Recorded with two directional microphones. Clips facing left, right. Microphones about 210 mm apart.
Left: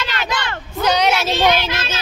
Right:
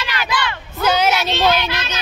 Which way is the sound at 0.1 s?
25° left (ahead or behind).